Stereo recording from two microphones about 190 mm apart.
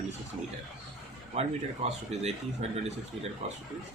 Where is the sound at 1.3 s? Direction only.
35° right (ahead or behind).